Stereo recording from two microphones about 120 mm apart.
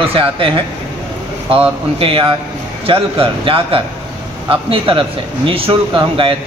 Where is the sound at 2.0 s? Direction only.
45° right (ahead or behind).